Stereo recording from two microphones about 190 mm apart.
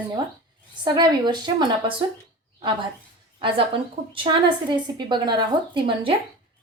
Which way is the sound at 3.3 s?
30° right (ahead or behind).